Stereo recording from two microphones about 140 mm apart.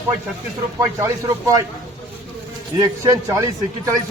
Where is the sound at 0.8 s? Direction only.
20° right (ahead or behind).